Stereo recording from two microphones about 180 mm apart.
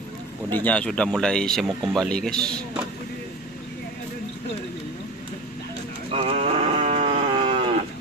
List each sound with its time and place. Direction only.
0.5 s speech: 10° left (ahead or behind)
6.1 s livestock: 35° right (ahead or behind)